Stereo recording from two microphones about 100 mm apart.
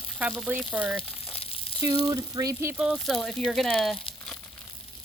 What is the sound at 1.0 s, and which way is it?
Crumpling, 75° left (ahead or behind).